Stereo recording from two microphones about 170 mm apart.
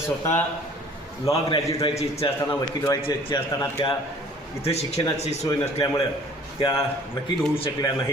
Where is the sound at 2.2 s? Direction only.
35° left (ahead or behind).